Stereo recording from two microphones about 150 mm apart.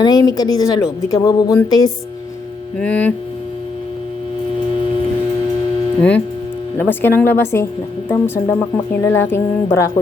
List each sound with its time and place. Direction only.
0.0 s speech: 25° left (ahead or behind)
2.7 s a woman's voice: 10° left (ahead or behind)
6.0 s a woman's voice: 10° left (ahead or behind)